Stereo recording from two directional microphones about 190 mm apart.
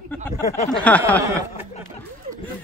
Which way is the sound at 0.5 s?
35° left (ahead or behind).